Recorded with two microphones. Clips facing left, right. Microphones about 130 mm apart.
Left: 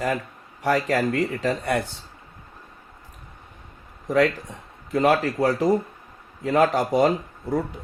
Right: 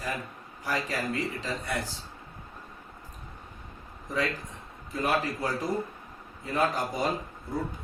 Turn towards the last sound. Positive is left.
turn(degrees=75)  # may be behind; listen again after turning